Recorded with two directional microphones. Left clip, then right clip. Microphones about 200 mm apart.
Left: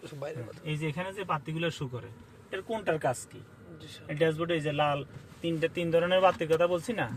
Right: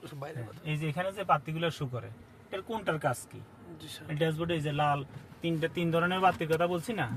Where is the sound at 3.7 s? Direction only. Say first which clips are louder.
Right 2 dB; 35° right (ahead or behind).